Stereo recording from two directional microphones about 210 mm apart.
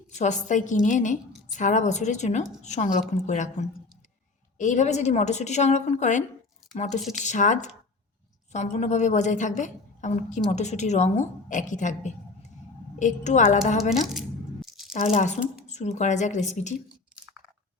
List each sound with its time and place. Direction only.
0.1 s a woman's voice: 35° left (ahead or behind)
14.1 s tearing: centre (ahead or behind)
14.9 s a woman's voice: 35° left (ahead or behind)